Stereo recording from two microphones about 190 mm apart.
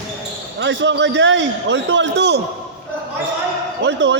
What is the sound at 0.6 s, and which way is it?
A man's voice, 70° right (ahead or behind).